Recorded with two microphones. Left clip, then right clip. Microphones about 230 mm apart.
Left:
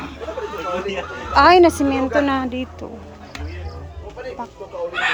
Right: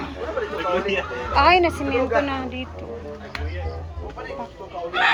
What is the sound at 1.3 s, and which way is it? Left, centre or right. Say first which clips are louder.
A woman's voice: left 5 dB; left.